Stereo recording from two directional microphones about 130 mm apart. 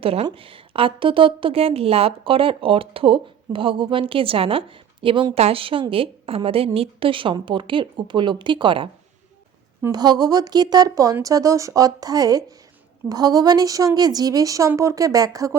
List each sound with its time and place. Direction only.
0.0 s a woman's voice: 50° right (ahead or behind)
9.9 s speech: 30° right (ahead or behind)